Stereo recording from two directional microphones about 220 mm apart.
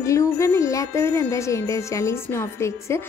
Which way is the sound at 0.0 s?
15° left (ahead or behind).